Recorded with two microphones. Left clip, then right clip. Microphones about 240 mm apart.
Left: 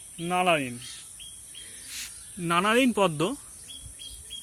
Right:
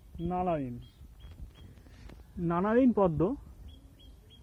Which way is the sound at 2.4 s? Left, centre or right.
Centre.